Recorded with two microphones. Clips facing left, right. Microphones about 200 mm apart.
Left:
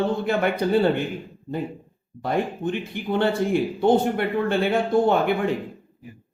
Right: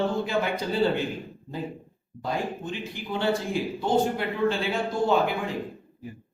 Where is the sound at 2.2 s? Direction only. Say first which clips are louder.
Left 6 dB; 60° left (ahead or behind).